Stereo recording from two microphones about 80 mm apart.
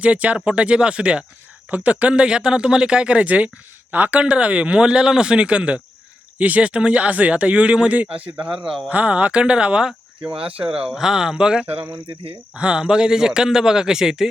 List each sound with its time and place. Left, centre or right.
0.0 s speech: centre